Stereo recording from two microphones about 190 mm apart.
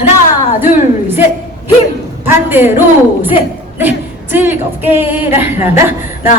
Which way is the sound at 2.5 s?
10° right (ahead or behind).